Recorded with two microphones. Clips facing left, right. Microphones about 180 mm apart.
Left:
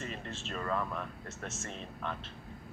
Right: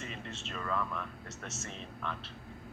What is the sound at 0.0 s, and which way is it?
Speech, 40° left (ahead or behind).